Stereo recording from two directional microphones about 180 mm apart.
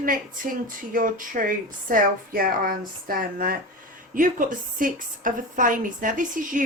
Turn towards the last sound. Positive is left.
turn(degrees=-45)  # may be behind; listen again after turning